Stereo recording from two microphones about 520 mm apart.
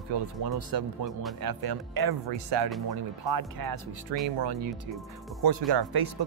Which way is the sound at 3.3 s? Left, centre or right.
Right.